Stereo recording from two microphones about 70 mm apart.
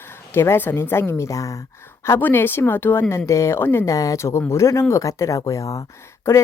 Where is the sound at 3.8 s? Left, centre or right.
Left.